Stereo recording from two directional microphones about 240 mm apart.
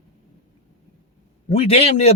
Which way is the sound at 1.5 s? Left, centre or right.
Left.